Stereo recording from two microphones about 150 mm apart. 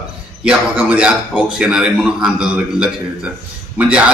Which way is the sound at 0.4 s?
5° right (ahead or behind).